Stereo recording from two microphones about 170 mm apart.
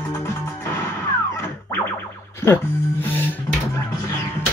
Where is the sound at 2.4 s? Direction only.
10° left (ahead or behind).